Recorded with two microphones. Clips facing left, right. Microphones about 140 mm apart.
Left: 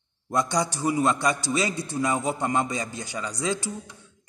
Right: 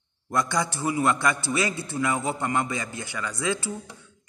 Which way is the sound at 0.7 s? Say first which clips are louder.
Left 1 dB; 15° left (ahead or behind).